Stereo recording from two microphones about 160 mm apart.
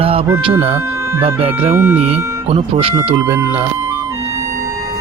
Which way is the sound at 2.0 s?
35° right (ahead or behind).